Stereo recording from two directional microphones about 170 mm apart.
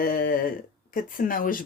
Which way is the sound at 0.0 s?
55° left (ahead or behind).